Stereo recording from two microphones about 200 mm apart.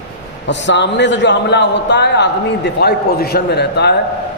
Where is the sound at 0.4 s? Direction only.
60° left (ahead or behind).